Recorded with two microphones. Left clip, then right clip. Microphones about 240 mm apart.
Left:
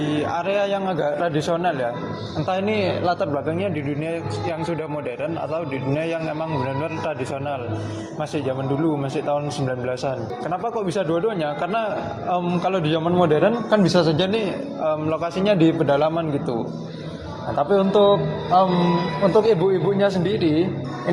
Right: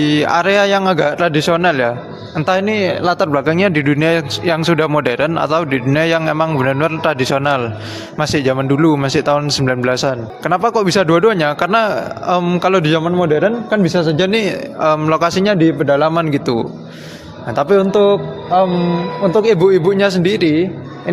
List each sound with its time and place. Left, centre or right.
0.1 s a man's voice: right
17.6 s a man's voice: right